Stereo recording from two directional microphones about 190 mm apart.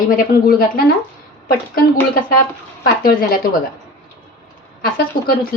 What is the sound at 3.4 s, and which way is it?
Speech, 50° left (ahead or behind).